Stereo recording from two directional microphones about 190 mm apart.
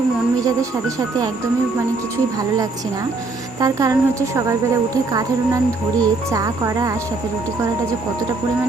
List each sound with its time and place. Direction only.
3.6 s a woman's voice: 20° right (ahead or behind)